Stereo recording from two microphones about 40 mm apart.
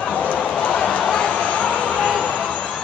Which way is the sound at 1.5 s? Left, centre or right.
Left.